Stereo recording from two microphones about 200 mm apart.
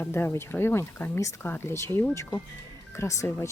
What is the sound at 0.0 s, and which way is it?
A woman's voice, 10° left (ahead or behind).